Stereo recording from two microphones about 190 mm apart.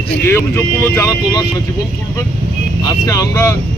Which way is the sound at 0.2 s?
15° left (ahead or behind).